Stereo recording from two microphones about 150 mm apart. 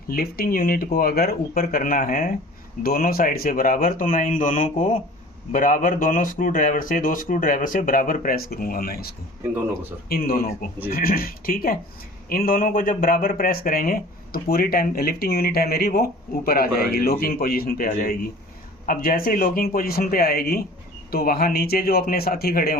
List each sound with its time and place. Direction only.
0.1 s speech: 85° left; by 2.3 s 60° left (ahead or behind)
2.8 s a man's voice: 80° left